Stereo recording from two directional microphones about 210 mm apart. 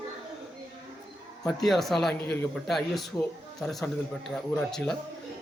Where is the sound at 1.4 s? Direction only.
5° left (ahead or behind).